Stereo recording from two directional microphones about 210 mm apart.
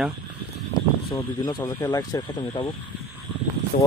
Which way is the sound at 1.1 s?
20° left (ahead or behind).